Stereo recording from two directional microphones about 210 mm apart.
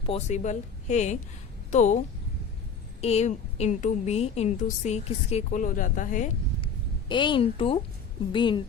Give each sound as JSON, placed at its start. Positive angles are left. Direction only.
{"t": 0.0, "sound": "a woman's voice", "side_deg": 30}
{"t": 3.0, "sound": "a woman's voice", "side_deg": 30}
{"t": 7.1, "sound": "a woman's voice", "side_deg": 25}